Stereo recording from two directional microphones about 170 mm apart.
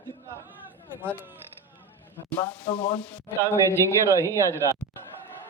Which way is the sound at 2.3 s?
10° left (ahead or behind).